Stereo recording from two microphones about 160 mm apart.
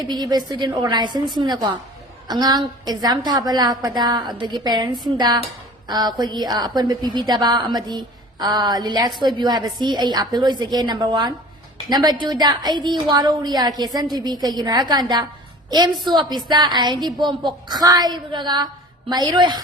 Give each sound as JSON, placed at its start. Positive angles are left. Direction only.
{"t": 0.0, "sound": "a woman's voice", "side_deg": -25}